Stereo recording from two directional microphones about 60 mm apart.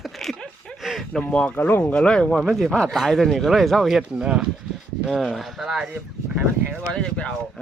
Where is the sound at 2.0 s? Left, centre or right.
Centre.